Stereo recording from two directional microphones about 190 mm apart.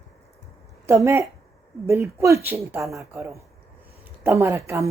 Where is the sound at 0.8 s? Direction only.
15° right (ahead or behind).